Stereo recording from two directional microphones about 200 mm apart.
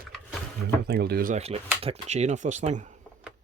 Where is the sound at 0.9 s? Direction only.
55° right (ahead or behind).